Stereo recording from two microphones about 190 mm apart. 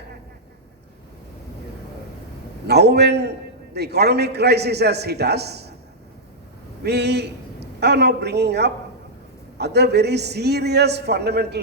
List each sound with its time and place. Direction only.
2.6 s a man's voice: 60° right (ahead or behind)
6.8 s a man's voice: 60° right (ahead or behind)